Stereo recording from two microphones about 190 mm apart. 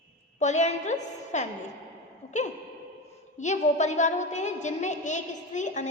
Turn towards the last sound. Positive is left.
turn(degrees=40)  # may be behind; listen again after turning